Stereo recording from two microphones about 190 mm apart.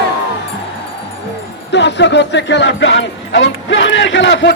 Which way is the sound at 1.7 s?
65° left (ahead or behind).